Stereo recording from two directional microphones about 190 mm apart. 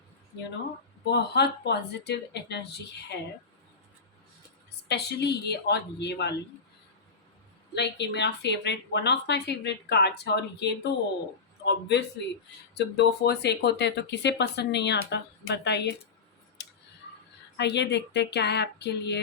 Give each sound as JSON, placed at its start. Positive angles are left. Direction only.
{"t": 1.0, "sound": "speech", "side_deg": 60}
{"t": 4.9, "sound": "speech", "side_deg": 60}
{"t": 7.8, "sound": "speech", "side_deg": 65}
{"t": 16.6, "sound": "a sound", "side_deg": 65}
{"t": 17.6, "sound": "speech", "side_deg": 65}